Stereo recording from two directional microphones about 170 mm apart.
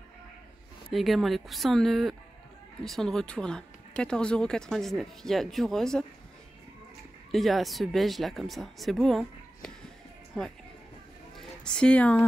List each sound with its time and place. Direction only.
0.9 s speech: centre (ahead or behind)
7.2 s speech: centre (ahead or behind)
11.3 s speech: 5° left (ahead or behind)